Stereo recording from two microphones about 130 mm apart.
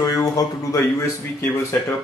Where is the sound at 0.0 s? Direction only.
25° left (ahead or behind).